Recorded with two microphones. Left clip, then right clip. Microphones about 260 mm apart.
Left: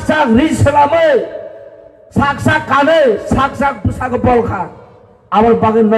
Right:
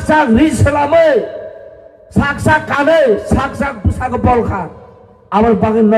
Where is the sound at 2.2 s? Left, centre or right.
Centre.